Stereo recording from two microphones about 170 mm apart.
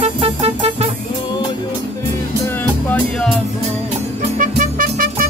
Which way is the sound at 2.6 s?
5° left (ahead or behind).